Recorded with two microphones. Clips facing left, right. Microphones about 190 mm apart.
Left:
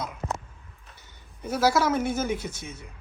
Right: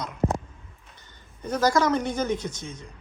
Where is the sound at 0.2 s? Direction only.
35° right (ahead or behind).